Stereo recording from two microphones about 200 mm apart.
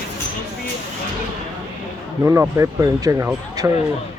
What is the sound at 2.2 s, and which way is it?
Speech, 15° right (ahead or behind).